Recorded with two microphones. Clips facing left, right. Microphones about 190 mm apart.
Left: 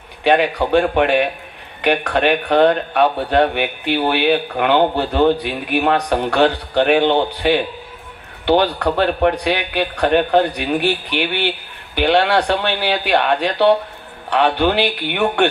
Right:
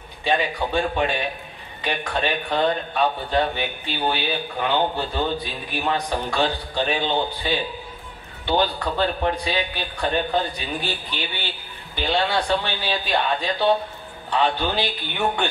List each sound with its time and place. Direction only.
0.2 s speech: 70° left (ahead or behind)